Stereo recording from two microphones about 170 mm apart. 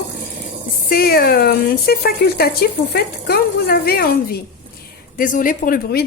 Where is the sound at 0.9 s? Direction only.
60° left (ahead or behind).